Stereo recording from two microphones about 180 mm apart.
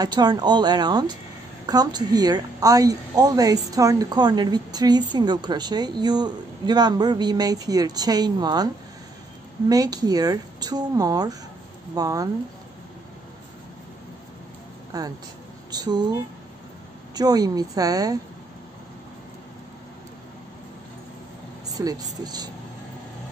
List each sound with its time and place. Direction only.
0.0 s a woman's voice: 25° right (ahead or behind)
9.7 s a woman's voice: 20° right (ahead or behind)
14.9 s a woman's voice: 20° right (ahead or behind)
17.1 s a woman's voice: 20° right (ahead or behind)
21.7 s a woman's voice: 20° right (ahead or behind)